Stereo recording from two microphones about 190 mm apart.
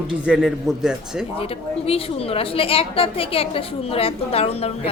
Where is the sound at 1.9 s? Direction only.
30° left (ahead or behind).